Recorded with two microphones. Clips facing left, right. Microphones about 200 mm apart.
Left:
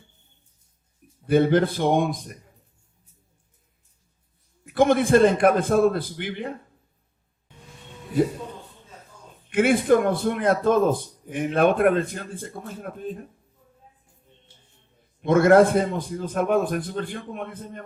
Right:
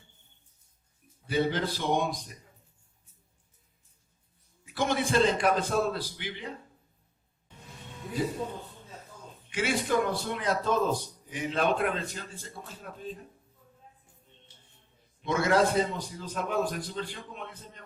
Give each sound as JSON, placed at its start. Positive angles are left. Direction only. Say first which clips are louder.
{"t": 1.3, "sound": "a man's voice", "louder": "left 10 dB", "side_deg": 55}
{"t": 4.6, "sound": "a man's voice", "louder": "left 10 dB", "side_deg": 55}
{"t": 9.5, "sound": "a man's voice", "louder": "left 10 dB", "side_deg": 55}
{"t": 15.2, "sound": "a man's voice", "louder": "left 10 dB", "side_deg": 55}